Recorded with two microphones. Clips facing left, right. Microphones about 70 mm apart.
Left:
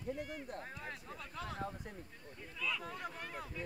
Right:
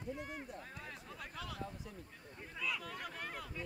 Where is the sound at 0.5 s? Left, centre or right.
Left.